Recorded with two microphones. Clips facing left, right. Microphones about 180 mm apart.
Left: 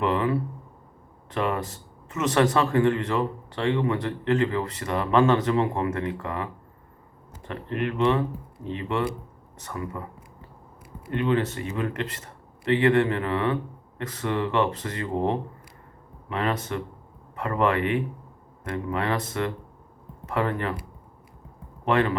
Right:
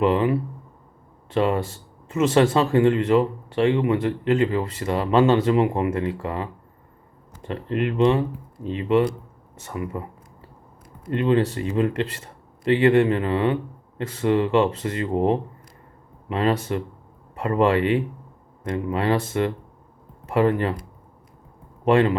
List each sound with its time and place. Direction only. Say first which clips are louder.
0.0 s speech: right 4 dB; 20° right (ahead or behind)
11.1 s speech: right 4 dB; 25° right (ahead or behind)
21.8 s speech: right 5 dB; 25° right (ahead or behind)